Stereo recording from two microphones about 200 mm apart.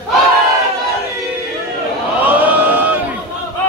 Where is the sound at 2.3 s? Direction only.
10° right (ahead or behind).